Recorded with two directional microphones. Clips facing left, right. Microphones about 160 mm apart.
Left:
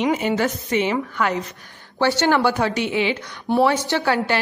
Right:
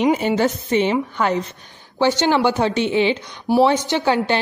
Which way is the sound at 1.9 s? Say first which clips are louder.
Right 1 dB; 20° right (ahead or behind).